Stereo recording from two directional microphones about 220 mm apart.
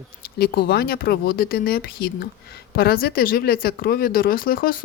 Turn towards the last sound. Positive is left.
turn(degrees=40)  # may be behind; listen again after turning